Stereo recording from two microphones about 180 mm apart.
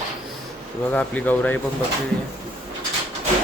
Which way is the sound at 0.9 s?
10° left (ahead or behind).